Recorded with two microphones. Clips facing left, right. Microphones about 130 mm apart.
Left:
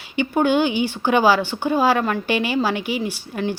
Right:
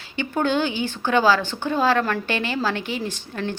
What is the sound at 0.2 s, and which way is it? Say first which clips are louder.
A woman's voice: left 4 dB; 15° left (ahead or behind).